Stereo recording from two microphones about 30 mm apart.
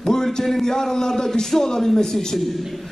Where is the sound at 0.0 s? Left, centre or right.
Left.